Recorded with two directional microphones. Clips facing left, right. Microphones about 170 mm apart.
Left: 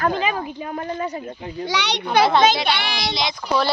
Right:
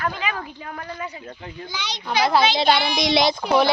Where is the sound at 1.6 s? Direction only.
75° left (ahead or behind).